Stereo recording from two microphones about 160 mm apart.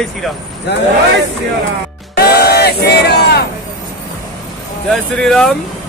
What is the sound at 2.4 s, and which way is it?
Speech, 90° left.